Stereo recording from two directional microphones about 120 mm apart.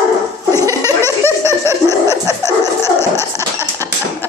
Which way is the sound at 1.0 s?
20° left (ahead or behind).